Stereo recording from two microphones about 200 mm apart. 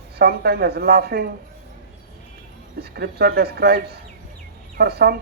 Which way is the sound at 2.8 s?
50° right (ahead or behind).